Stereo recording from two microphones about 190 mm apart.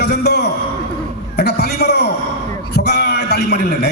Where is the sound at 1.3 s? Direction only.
60° left (ahead or behind).